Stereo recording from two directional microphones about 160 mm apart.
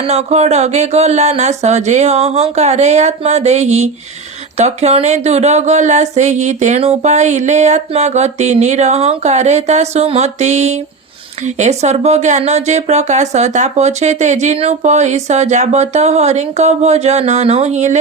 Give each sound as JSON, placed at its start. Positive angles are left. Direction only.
{"t": 0.1, "sound": "speech", "side_deg": -40}